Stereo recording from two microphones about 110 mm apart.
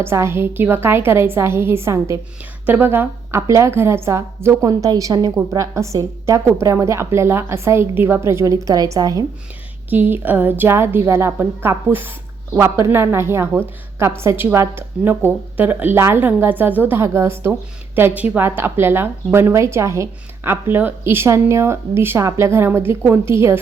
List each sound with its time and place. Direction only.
0.0 s a woman's voice: 25° right (ahead or behind)
9.9 s a woman's voice: 15° right (ahead or behind)